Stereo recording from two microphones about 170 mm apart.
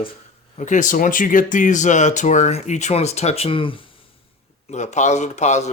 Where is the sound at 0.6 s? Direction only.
50° left (ahead or behind); by 3.7 s 30° left (ahead or behind).